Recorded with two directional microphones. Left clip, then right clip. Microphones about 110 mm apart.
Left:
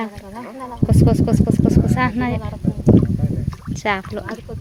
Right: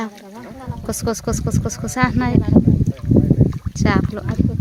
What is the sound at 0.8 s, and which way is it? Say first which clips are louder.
Speech: left 4 dB; 50° right (ahead or behind).